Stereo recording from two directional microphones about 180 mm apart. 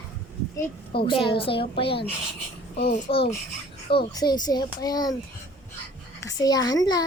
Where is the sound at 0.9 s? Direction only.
30° left (ahead or behind).